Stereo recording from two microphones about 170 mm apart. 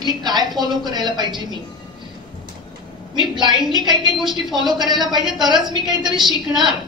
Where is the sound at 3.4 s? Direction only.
25° right (ahead or behind).